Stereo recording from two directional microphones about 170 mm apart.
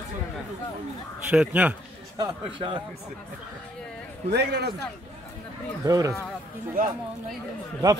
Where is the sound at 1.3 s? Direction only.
10° right (ahead or behind).